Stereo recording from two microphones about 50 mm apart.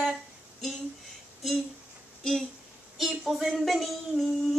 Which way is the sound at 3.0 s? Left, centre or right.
Centre.